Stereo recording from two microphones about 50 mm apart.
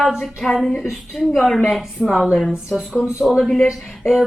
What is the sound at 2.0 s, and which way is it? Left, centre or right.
Speech, centre.